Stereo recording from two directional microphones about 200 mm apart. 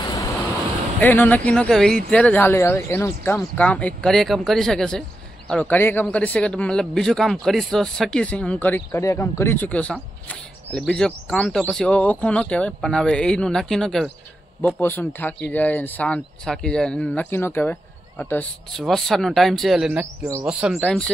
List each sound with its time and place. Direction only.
0.0 s waves: 15° left (ahead or behind)
1.0 s speech: 10° left (ahead or behind); by 20.5 s 10° right (ahead or behind)
20.6 s speech: centre (ahead or behind)